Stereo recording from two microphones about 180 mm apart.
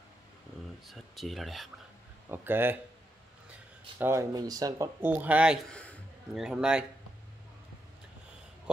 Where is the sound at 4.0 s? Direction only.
15° right (ahead or behind).